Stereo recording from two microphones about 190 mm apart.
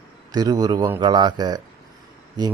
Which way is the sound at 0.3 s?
20° right (ahead or behind).